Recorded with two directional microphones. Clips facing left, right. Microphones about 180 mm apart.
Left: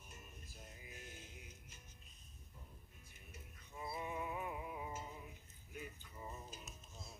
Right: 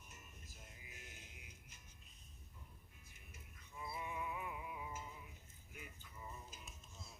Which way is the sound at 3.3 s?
30° left (ahead or behind).